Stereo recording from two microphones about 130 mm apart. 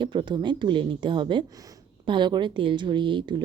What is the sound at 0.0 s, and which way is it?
Speech, 40° right (ahead or behind).